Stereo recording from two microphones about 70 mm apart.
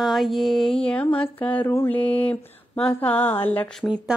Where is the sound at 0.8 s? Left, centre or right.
Centre.